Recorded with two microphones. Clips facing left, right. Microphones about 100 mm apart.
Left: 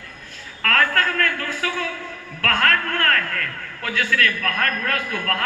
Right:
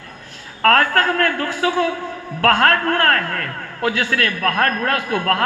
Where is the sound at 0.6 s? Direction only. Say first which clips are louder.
Right 5 dB; 40° right (ahead or behind).